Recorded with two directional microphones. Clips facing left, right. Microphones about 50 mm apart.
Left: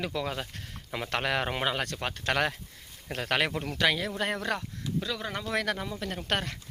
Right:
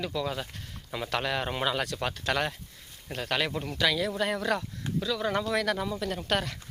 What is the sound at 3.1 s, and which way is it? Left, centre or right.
Speech, left.